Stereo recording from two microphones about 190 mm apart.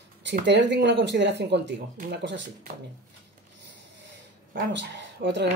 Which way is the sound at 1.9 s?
50° right (ahead or behind).